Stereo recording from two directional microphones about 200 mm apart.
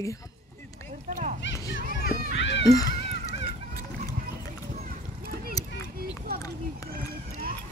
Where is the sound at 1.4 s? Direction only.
65° left (ahead or behind).